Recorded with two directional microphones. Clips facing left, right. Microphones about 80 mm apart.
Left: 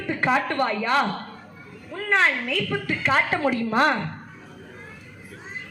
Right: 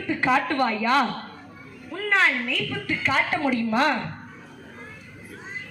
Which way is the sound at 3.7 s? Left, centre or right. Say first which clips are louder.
Left 2 dB; left.